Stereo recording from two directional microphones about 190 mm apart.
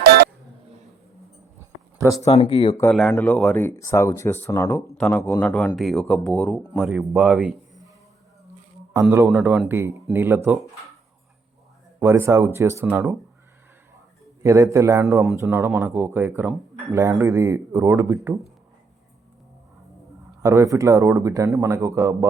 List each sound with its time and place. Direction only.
0.0 s a sound: 55° right (ahead or behind)
2.3 s speech: 30° left (ahead or behind)
2.9 s speech: 5° left (ahead or behind)
8.9 s a man's voice: 15° right (ahead or behind)
11.9 s a man's voice: 10° right (ahead or behind)
14.4 s a man's voice: 15° right (ahead or behind)
15.0 s speech: centre (ahead or behind)
15.4 s a man's voice: 10° right (ahead or behind)
20.4 s a man's voice: 15° right (ahead or behind)